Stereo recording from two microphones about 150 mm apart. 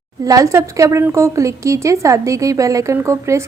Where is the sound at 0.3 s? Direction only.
20° right (ahead or behind).